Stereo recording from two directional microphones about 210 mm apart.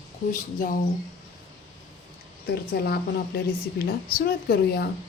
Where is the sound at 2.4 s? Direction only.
50° left (ahead or behind).